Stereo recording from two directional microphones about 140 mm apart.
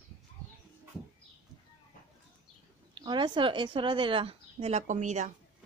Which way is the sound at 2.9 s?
35° right (ahead or behind).